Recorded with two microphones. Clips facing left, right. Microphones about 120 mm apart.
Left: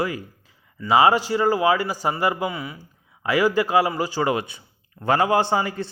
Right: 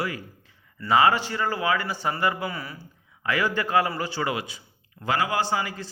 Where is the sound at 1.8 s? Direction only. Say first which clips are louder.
Left 4 dB; 35° left (ahead or behind).